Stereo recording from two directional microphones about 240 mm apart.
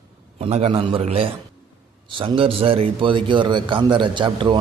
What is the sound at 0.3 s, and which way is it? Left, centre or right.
Speech, right.